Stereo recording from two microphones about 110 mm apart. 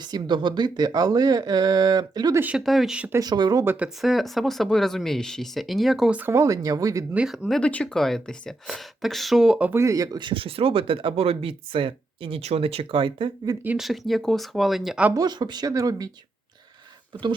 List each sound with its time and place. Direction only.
0.0 s speech: 40° right (ahead or behind)
2.3 s speech: 15° right (ahead or behind)
2.6 s speech: centre (ahead or behind)
3.1 s speech: 35° right (ahead or behind)
3.6 s speech: 20° right (ahead or behind)
3.8 s speech: centre (ahead or behind)
6.1 s speech: 15° right (ahead or behind)
6.3 s speech: 30° right (ahead or behind)
7.1 s speech: 5° right (ahead or behind)
9.7 s speech: 30° right (ahead or behind)
10.2 s speech: 50° right (ahead or behind)
13.7 s speech: centre (ahead or behind)
15.1 s speech: 40° right (ahead or behind)